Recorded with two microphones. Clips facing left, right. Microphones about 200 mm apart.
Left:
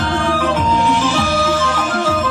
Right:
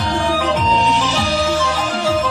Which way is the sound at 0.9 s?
55° left (ahead or behind).